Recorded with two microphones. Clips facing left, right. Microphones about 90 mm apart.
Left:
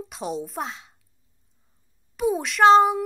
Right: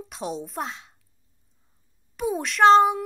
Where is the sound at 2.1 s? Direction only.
Centre (ahead or behind).